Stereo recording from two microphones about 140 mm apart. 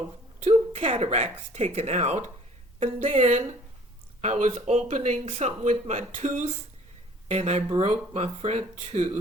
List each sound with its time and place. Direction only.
0.9 s speech: 55° right (ahead or behind)
2.8 s speech: 65° right (ahead or behind); by 9.1 s 50° right (ahead or behind)